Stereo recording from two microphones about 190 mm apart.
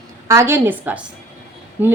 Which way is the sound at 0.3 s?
15° right (ahead or behind).